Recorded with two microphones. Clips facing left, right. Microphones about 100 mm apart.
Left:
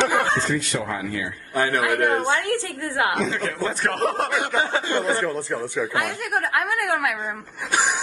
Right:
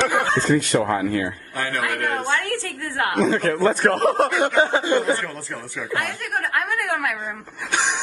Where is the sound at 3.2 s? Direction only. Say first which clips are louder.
Right 6 dB; 50° right (ahead or behind).